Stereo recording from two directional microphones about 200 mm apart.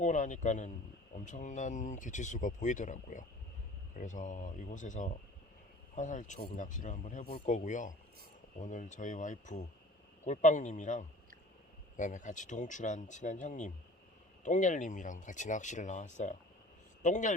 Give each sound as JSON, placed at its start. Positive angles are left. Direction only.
{"t": 0.0, "sound": "a man's voice", "side_deg": 40}